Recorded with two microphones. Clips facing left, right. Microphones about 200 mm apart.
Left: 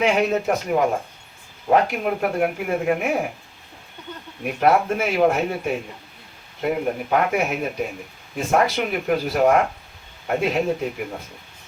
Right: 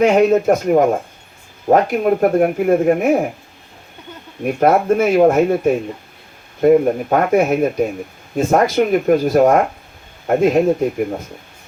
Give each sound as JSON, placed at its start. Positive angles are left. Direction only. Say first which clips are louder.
{"t": 0.0, "sound": "speech", "louder": "right 8 dB", "side_deg": -45}
{"t": 4.6, "sound": "speech", "louder": "right 5 dB", "side_deg": -45}